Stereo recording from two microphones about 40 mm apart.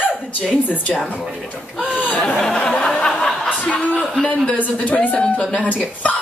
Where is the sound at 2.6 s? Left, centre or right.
Left.